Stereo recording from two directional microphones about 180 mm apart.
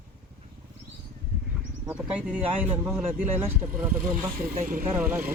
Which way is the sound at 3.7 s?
10° right (ahead or behind).